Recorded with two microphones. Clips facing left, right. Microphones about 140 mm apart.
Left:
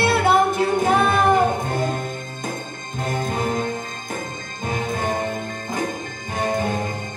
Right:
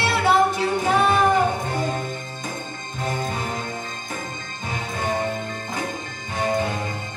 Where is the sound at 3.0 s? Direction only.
50° left (ahead or behind).